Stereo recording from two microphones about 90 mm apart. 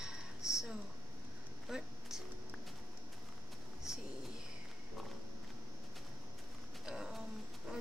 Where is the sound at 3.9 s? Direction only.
5° right (ahead or behind).